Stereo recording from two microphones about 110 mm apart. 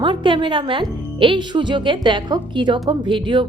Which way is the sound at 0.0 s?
50° right (ahead or behind).